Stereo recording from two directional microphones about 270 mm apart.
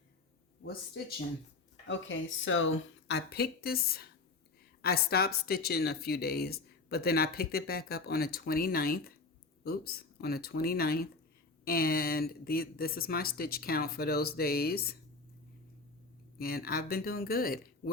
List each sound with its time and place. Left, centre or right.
1.9 s speech: left
16.4 s speech: left